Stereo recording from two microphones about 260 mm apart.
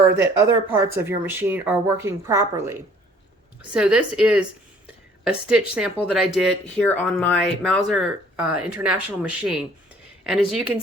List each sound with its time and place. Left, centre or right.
0.2 s speech: centre
3.8 s speech: centre